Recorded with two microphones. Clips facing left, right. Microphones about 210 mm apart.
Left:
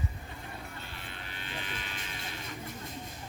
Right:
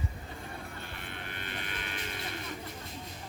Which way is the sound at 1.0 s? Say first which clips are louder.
Right 2 dB; 55° right (ahead or behind).